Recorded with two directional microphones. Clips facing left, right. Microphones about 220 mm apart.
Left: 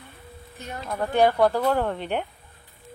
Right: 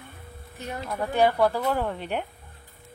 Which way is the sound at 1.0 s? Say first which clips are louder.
Left 2 dB; 5° right (ahead or behind).